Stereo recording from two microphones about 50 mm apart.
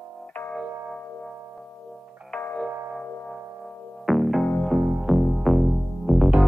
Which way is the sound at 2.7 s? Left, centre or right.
Right.